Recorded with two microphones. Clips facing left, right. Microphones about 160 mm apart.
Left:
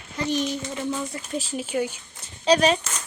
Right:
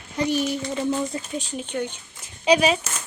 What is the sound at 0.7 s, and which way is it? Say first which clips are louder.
Speech: right 4 dB; 25° right (ahead or behind).